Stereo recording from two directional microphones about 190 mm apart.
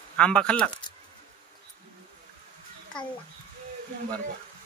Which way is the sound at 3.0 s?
5° left (ahead or behind).